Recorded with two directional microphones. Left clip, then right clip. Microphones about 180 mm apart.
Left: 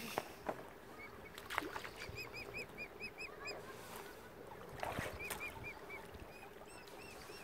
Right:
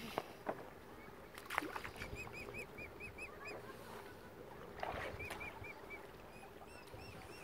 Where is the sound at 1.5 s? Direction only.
15° right (ahead or behind).